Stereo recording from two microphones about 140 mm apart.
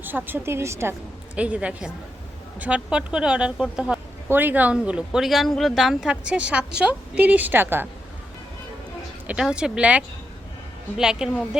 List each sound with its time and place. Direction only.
0.0 s a woman's voice: 15° right (ahead or behind)
1.4 s a woman's voice: 10° right (ahead or behind)
9.2 s a woman's voice: 5° right (ahead or behind)